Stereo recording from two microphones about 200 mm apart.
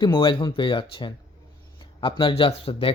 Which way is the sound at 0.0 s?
25° left (ahead or behind).